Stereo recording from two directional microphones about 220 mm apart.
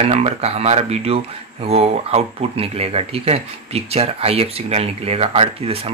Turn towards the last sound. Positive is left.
turn(degrees=-25)  # may be behind; listen again after turning